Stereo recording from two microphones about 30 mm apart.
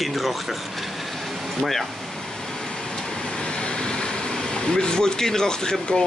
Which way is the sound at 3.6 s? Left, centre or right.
Left.